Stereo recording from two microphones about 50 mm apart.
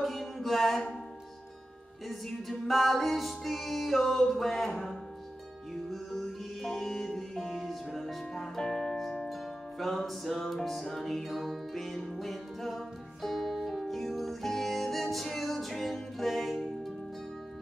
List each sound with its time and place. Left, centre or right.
0.0 s music: centre
2.0 s music: centre